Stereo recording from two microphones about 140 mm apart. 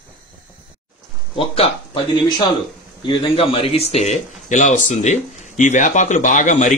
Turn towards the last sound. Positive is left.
turn(degrees=60)  # may be behind; listen again after turning